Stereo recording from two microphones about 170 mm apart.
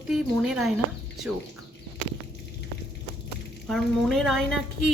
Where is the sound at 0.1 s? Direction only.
5° right (ahead or behind).